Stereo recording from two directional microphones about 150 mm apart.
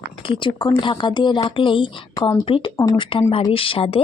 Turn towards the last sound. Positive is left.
turn(degrees=40)  # may be behind; listen again after turning